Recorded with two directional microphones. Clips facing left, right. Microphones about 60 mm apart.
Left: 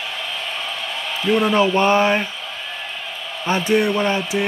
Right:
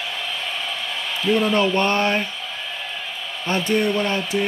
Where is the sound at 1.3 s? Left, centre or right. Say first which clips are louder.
Left 2 dB; left.